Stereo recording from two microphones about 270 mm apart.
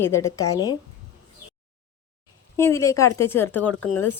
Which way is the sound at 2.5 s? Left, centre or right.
Centre.